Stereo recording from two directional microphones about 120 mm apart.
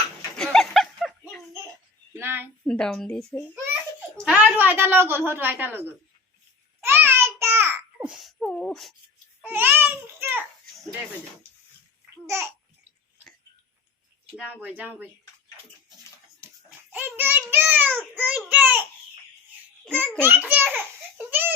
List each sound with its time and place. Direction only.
0.3 s a sound: 5° left (ahead or behind)
2.1 s a sound: 20° right (ahead or behind)
2.6 s a woman's voice: 5° left (ahead or behind)
4.5 s a woman's voice: 15° right (ahead or behind)
6.8 s a sound: 20° right (ahead or behind); by 9.0 s centre (ahead or behind)
9.4 s baby cry: 15° right (ahead or behind)
12.2 s babbling: 25° right (ahead or behind)
14.3 s a woman's voice: 10° right (ahead or behind)
16.9 s a child's voice: 15° right (ahead or behind)
20.1 s a child's voice: 15° right (ahead or behind)